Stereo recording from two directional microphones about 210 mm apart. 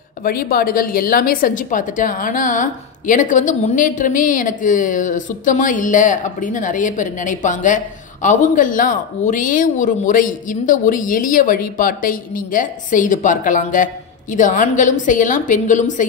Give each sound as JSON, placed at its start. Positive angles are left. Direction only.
{"t": 0.2, "sound": "a woman's voice", "side_deg": 45}